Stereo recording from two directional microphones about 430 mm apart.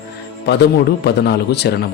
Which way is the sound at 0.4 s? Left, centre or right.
Left.